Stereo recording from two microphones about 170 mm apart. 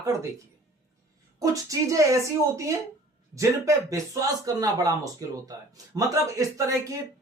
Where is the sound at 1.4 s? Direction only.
20° right (ahead or behind).